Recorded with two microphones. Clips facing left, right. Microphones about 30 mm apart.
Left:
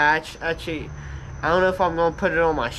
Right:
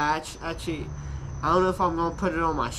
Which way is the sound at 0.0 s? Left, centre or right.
Left.